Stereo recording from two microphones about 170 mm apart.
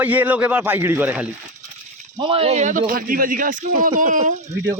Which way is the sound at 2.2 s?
35° right (ahead or behind).